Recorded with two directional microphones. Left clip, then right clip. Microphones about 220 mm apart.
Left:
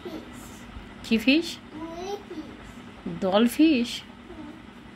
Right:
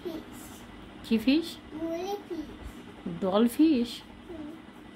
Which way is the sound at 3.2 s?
15° right (ahead or behind).